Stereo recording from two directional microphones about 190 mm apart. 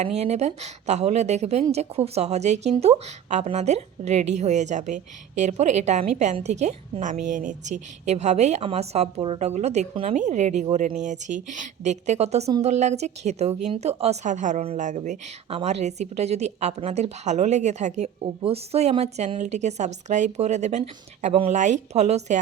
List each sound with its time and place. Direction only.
0.2 s a woman's voice: 35° right (ahead or behind)